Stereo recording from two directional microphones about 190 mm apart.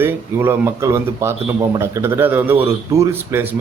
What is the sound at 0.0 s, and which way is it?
A man's voice, 10° right (ahead or behind).